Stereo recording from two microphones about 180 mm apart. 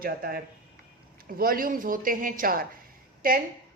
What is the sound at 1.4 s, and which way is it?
A woman's voice, 50° right (ahead or behind).